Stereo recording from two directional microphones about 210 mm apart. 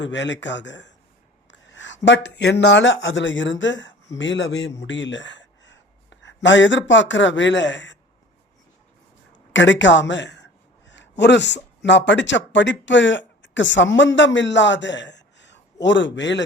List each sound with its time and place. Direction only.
0.0 s speech: 60° left (ahead or behind)
1.5 s a sound: 60° left (ahead or behind)
2.0 s speech: 55° left (ahead or behind)
9.5 s a man's voice: 60° left (ahead or behind)